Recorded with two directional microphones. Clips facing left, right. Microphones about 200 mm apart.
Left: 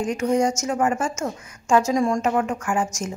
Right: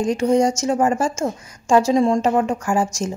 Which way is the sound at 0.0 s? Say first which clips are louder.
Right 4 dB; 30° right (ahead or behind).